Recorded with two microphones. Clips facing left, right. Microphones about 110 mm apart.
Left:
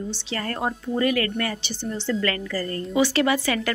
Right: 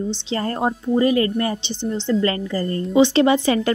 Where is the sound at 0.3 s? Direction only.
25° right (ahead or behind).